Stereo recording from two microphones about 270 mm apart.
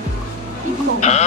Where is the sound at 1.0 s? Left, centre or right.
Left.